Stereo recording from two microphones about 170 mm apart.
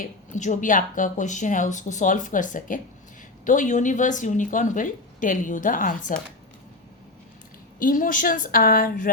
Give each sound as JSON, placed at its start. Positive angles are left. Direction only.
{"t": 0.0, "sound": "speech", "side_deg": 45}
{"t": 7.8, "sound": "a woman's voice", "side_deg": 55}